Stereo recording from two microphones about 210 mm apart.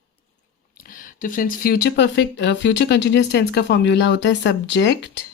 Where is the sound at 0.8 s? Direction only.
40° left (ahead or behind); by 5.2 s 55° left (ahead or behind).